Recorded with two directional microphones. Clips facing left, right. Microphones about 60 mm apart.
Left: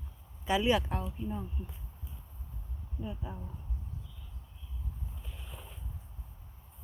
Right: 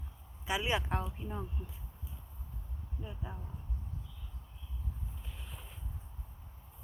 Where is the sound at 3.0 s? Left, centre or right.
Right.